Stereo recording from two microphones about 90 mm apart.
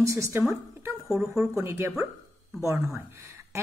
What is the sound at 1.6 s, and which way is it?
Speech, 25° right (ahead or behind).